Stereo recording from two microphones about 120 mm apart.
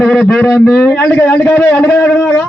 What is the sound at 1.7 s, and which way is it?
Speech, 5° left (ahead or behind).